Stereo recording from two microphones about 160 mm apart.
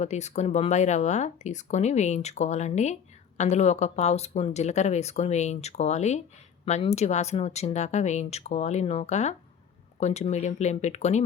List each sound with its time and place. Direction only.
0.0 s speech: 45° left (ahead or behind)